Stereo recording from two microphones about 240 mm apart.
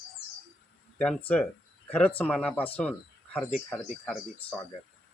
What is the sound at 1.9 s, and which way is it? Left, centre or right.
Speech, centre.